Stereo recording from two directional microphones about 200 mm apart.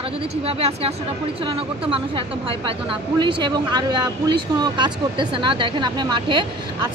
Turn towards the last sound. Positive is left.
turn(degrees=-25)  # may be behind; listen again after turning